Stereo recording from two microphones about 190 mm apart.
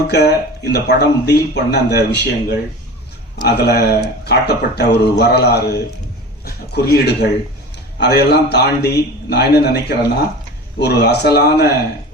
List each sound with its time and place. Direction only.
0.1 s a man's voice: 60° left (ahead or behind)